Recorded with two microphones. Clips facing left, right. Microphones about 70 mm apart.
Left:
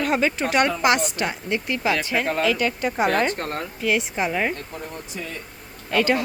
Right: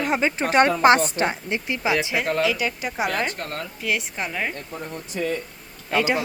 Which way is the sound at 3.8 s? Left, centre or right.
Centre.